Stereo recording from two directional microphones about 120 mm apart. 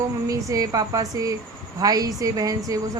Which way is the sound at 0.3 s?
30° right (ahead or behind).